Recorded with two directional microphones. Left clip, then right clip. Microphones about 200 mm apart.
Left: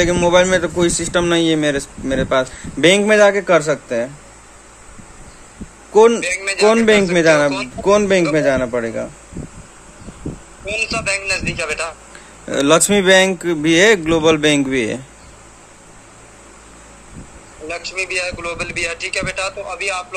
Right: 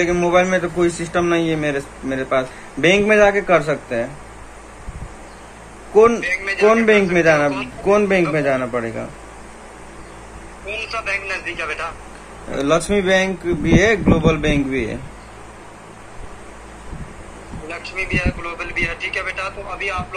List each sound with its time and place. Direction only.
0.0 s speech: 55° left (ahead or behind)
5.9 s a man's voice: 50° left (ahead or behind)
6.2 s a man's voice: 35° left (ahead or behind)
6.7 s a man's voice: 50° left (ahead or behind)
10.6 s a man's voice: 35° left (ahead or behind)
12.4 s speech: 60° left (ahead or behind)
17.6 s a man's voice: 35° left (ahead or behind)